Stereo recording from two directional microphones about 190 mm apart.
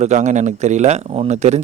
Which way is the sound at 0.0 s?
40° right (ahead or behind).